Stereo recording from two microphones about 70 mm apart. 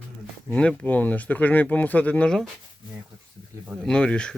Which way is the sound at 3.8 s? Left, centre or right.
Centre.